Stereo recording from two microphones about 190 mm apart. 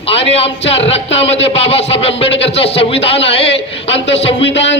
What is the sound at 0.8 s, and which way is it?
Speech, 70° left (ahead or behind).